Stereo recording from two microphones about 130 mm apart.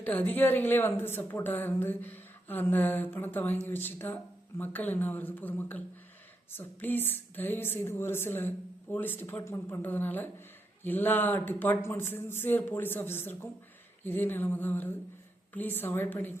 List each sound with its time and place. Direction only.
0.0 s a woman's voice: 15° left (ahead or behind)